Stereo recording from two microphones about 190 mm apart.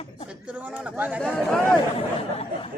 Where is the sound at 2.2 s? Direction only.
30° left (ahead or behind).